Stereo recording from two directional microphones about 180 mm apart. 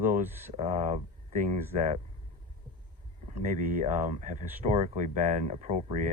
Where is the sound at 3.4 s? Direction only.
50° right (ahead or behind).